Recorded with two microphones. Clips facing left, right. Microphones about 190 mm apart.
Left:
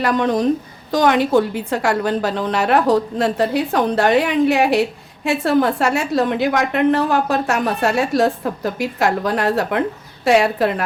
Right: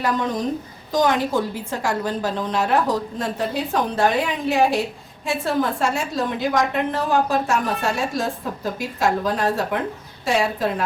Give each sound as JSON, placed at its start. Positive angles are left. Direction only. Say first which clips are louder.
{"t": 0.0, "sound": "a woman's voice", "louder": "left 6 dB", "side_deg": 70}